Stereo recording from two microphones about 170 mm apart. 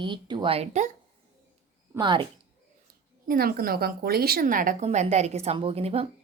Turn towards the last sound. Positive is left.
turn(degrees=-35)  # may be behind; listen again after turning